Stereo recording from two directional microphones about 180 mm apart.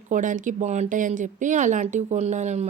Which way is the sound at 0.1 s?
45° right (ahead or behind).